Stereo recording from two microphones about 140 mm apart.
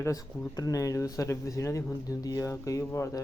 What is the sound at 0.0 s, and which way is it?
Speech, 25° left (ahead or behind).